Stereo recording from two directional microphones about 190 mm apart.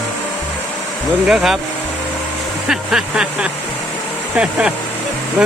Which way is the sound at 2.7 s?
5° right (ahead or behind).